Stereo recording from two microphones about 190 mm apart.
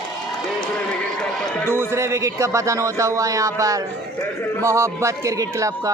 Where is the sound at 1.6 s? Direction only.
15° right (ahead or behind).